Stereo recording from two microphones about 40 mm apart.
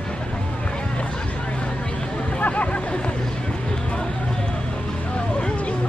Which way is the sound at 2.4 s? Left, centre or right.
Left.